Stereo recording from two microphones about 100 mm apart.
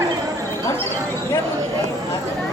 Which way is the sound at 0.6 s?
25° left (ahead or behind).